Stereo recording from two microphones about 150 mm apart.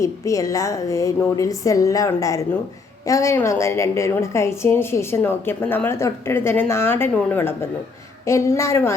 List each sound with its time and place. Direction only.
0.0 s a woman's voice: 20° left (ahead or behind)